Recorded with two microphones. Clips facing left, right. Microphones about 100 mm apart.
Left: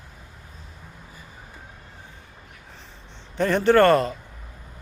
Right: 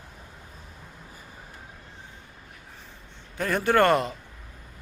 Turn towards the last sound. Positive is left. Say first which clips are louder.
# left 4 dB
turn(degrees=-15)  # may be behind; listen again after turning